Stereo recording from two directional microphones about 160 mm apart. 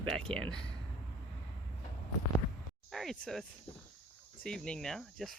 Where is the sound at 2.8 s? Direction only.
Centre (ahead or behind).